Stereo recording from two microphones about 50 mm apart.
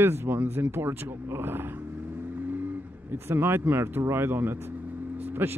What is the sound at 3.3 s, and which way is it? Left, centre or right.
Speech, right.